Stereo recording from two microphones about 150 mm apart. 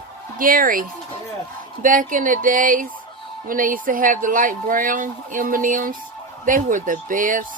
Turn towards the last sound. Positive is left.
turn(degrees=-65)  # may be behind; listen again after turning